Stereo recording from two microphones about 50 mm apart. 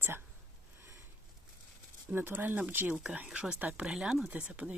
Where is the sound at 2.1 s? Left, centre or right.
Right.